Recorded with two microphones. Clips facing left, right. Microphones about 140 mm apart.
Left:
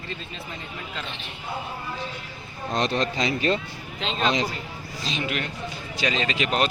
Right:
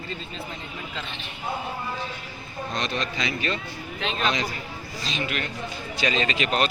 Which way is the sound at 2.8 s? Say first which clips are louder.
Left 5 dB; 30° left (ahead or behind).